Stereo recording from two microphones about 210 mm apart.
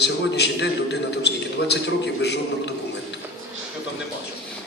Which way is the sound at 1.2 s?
55° left (ahead or behind).